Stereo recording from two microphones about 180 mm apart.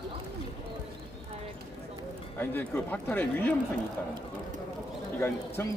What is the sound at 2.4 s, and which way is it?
Speech, 10° left (ahead or behind).